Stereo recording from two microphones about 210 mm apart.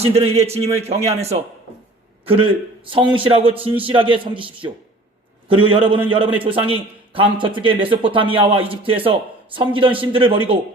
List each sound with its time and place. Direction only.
0.0 s a man's voice: 30° right (ahead or behind)